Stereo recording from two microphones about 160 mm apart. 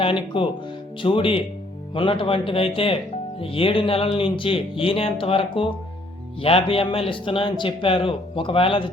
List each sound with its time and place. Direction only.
0.0 s a man's voice: 30° left (ahead or behind)